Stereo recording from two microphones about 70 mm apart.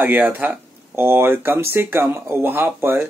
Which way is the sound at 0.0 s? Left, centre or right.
Right.